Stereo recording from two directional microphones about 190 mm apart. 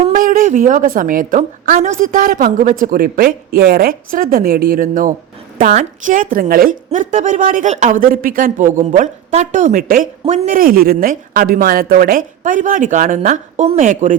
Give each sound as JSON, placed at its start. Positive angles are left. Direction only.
{"t": 0.0, "sound": "a woman's voice", "side_deg": -45}